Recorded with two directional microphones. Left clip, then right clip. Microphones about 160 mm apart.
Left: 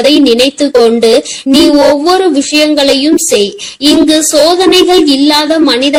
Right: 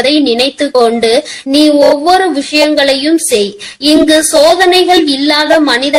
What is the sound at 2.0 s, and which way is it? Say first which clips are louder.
Speech: left 1 dB; 35° left (ahead or behind).